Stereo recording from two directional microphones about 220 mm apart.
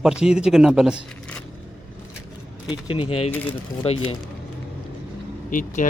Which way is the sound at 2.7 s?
25° left (ahead or behind).